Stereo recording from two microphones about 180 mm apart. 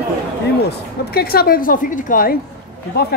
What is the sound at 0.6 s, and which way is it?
A woman's voice, 60° left (ahead or behind).